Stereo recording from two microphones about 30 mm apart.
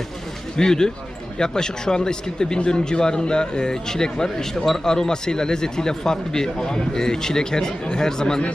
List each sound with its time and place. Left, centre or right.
0.5 s speech: left